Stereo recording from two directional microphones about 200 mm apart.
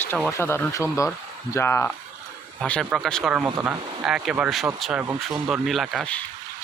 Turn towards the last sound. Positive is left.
turn(degrees=5)  # may be behind; listen again after turning